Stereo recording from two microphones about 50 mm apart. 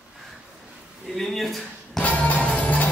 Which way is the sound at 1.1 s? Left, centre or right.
Centre.